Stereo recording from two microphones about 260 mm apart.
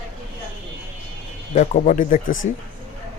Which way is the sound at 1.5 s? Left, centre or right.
Left.